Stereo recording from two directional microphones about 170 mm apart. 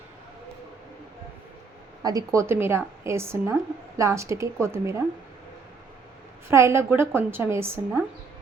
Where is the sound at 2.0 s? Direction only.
20° right (ahead or behind).